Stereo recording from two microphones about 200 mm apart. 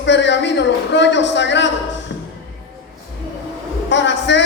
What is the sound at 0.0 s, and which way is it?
A man's voice, 60° left (ahead or behind).